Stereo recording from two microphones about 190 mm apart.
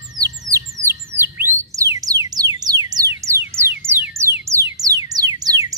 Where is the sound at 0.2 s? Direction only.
15° right (ahead or behind).